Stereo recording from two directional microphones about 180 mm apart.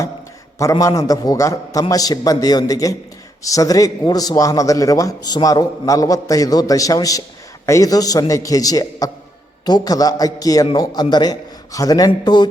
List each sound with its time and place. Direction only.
0.6 s a man's voice: 15° left (ahead or behind)